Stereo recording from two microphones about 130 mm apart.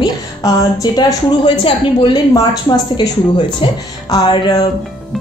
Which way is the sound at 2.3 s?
30° left (ahead or behind).